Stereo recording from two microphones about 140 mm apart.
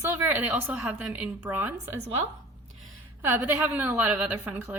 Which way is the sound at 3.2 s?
15° right (ahead or behind).